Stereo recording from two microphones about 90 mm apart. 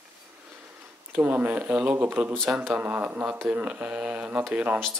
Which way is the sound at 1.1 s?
20° right (ahead or behind).